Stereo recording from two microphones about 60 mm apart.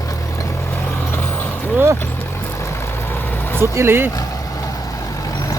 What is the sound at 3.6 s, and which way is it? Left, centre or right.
Speech, right.